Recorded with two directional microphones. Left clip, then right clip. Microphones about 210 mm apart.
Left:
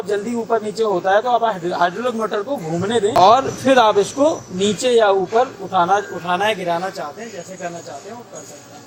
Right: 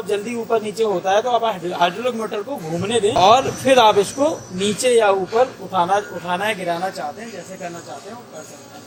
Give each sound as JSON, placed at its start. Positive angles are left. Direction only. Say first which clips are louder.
{"t": 0.1, "sound": "a man's voice", "louder": "left 1 dB", "side_deg": 35}